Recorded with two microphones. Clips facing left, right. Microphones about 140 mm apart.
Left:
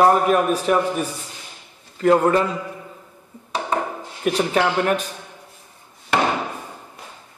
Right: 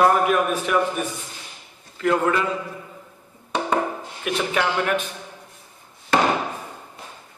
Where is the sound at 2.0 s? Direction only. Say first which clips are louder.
Left 5 dB; 35° left (ahead or behind).